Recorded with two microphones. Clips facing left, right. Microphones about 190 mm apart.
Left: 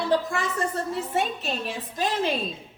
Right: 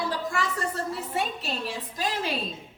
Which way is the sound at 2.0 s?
25° left (ahead or behind).